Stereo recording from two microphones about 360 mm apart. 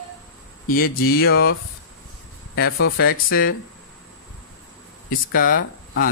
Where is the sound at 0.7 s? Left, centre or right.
Left.